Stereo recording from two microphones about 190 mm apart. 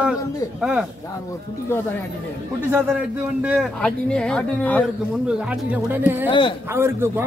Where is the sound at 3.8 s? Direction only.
5° left (ahead or behind).